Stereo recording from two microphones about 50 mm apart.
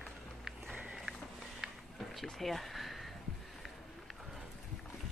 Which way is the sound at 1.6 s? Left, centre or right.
Centre.